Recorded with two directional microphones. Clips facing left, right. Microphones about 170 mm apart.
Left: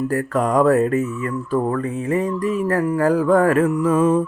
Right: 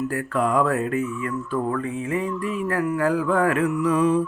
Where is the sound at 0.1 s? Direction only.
40° left (ahead or behind).